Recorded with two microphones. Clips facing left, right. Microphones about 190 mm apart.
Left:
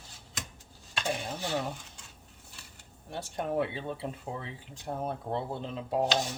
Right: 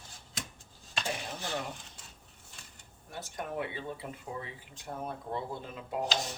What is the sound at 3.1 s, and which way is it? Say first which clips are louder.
Speech: left 6 dB; 30° left (ahead or behind).